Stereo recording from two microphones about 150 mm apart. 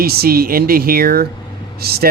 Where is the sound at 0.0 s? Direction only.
90° right.